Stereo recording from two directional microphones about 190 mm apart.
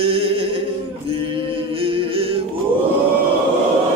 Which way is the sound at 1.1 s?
30° right (ahead or behind).